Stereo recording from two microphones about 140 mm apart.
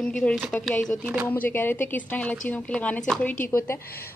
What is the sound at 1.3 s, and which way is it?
A woman's voice, 15° left (ahead or behind).